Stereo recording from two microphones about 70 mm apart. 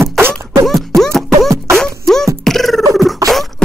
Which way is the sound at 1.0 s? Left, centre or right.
Centre.